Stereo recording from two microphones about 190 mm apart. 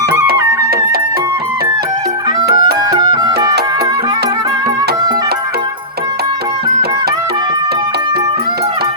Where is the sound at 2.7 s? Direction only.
20° right (ahead or behind).